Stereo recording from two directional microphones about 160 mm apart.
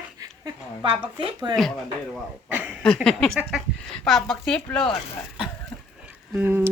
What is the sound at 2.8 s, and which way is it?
Speech, 5° left (ahead or behind).